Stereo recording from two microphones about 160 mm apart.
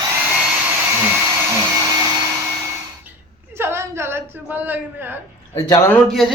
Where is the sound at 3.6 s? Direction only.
15° right (ahead or behind).